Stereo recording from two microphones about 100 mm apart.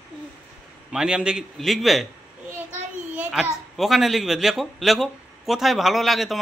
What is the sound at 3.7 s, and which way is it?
A man's voice, centre (ahead or behind).